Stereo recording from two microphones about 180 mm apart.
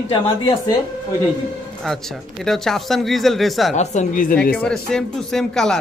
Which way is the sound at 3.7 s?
40° left (ahead or behind).